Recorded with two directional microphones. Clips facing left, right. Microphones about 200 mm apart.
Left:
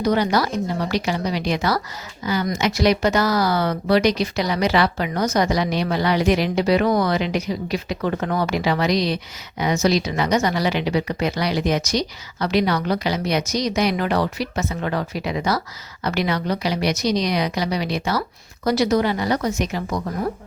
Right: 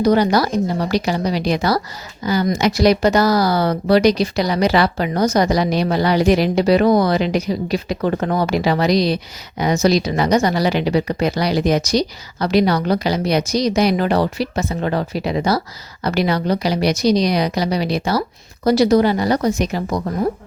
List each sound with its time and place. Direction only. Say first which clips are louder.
0.0 s speech: right 5 dB; 35° right (ahead or behind)